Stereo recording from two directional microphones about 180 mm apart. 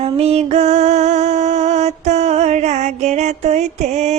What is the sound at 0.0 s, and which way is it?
Music, 35° right (ahead or behind).